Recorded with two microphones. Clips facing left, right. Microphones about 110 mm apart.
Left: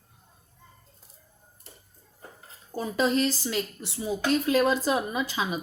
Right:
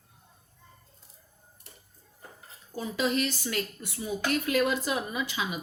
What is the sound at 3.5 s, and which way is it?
A woman's voice, 25° left (ahead or behind).